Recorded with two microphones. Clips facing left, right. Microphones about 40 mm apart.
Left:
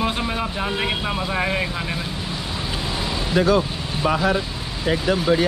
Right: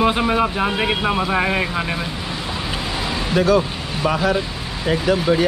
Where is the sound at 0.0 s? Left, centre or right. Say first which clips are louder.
Right 7 dB; right.